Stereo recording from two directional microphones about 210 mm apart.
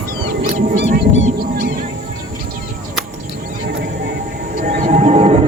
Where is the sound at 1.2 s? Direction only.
45° right (ahead or behind).